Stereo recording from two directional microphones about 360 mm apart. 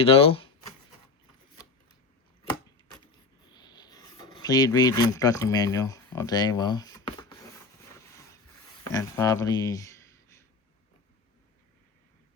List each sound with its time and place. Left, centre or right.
0.0 s speech: centre
3.5 s a sound: centre
8.9 s speech: centre